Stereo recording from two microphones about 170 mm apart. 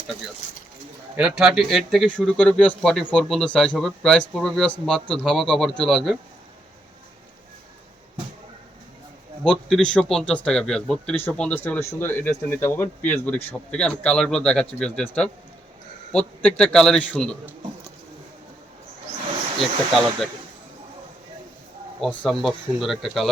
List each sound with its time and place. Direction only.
1.1 s a man's voice: 5° right (ahead or behind)
9.4 s a man's voice: centre (ahead or behind)
16.1 s a man's voice: 5° left (ahead or behind)
17.1 s a man's voice: 5° right (ahead or behind)
19.5 s a man's voice: centre (ahead or behind)
22.0 s a man's voice: centre (ahead or behind)